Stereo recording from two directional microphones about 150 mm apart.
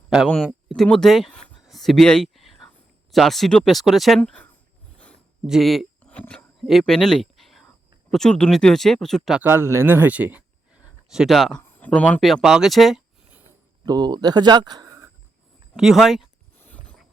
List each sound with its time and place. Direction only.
0.3 s speech: 5° left (ahead or behind)
5.5 s speech: centre (ahead or behind)
6.0 s a sound: 5° left (ahead or behind)
8.1 s speech: 5° left (ahead or behind)
9.4 s speech: 15° right (ahead or behind); by 11.6 s centre (ahead or behind)
11.6 s speech: 10° left (ahead or behind)
13.5 s speech: 25° right (ahead or behind)
15.7 s speech: 5° right (ahead or behind)
16.6 s pulleys: 10° left (ahead or behind)